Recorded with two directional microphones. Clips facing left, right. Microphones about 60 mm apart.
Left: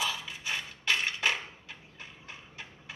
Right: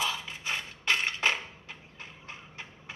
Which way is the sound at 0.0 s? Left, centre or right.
Right.